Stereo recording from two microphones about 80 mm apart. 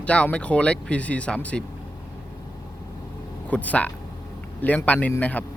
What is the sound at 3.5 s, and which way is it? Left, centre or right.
A man's voice, centre.